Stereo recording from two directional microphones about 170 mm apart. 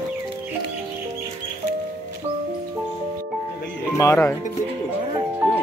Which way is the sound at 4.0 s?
20° left (ahead or behind).